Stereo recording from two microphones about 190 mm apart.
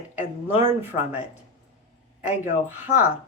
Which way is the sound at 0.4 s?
10° right (ahead or behind).